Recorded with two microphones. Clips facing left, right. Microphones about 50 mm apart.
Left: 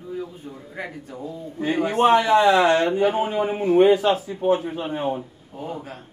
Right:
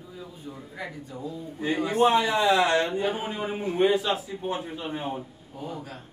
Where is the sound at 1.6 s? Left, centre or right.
Left.